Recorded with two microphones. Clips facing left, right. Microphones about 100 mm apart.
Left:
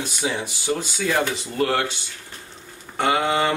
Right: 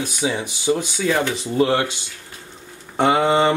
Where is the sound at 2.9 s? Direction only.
25° right (ahead or behind).